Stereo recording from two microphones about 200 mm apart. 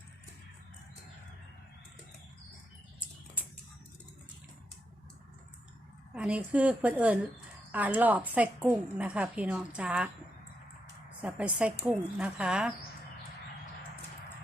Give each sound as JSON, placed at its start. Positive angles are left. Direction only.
{"t": 6.1, "sound": "a woman's voice", "side_deg": -5}
{"t": 11.2, "sound": "a woman's voice", "side_deg": -5}